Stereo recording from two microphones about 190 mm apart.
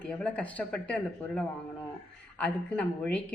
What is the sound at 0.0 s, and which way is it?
Speech, 5° left (ahead or behind).